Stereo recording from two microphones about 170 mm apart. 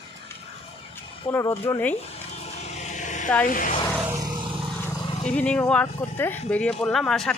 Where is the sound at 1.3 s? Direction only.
15° left (ahead or behind).